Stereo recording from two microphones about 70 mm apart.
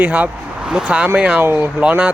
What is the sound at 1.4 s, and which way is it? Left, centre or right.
Speech, right.